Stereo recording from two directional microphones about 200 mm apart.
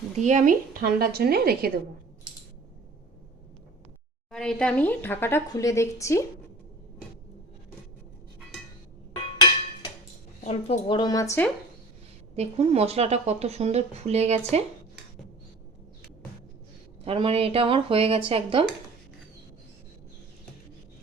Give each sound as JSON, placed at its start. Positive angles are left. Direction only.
{"t": 0.2, "sound": "a woman's voice", "side_deg": -35}
{"t": 4.3, "sound": "speech", "side_deg": 5}
{"t": 10.4, "sound": "a woman's voice", "side_deg": 30}
{"t": 12.4, "sound": "speech", "side_deg": -30}
{"t": 17.0, "sound": "speech", "side_deg": -30}